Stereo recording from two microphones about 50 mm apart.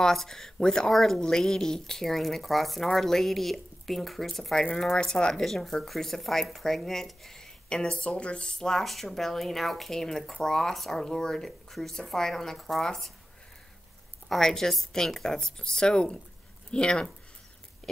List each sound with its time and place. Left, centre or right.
0.0 s speech: centre
4.9 s speech: centre
14.3 s speech: centre